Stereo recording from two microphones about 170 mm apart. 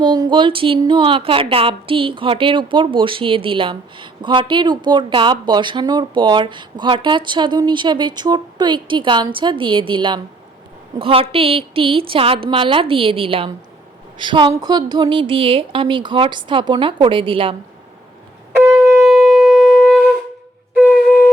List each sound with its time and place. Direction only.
0.0 s a woman's voice: 25° right (ahead or behind)
19.0 s shofar: centre (ahead or behind)
20.7 s wind instrument: 10° right (ahead or behind)